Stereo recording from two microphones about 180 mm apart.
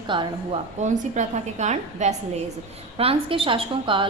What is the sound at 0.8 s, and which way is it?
A woman's voice, 40° right (ahead or behind).